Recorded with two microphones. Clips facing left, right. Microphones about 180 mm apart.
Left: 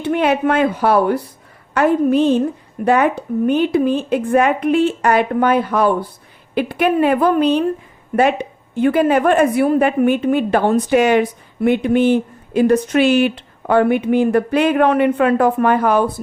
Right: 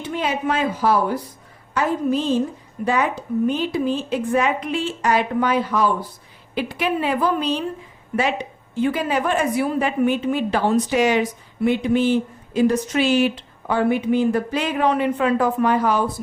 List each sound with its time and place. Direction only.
0.0 s a woman's voice: 65° left (ahead or behind)